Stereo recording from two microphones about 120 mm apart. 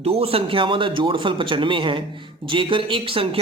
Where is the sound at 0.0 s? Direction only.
55° right (ahead or behind).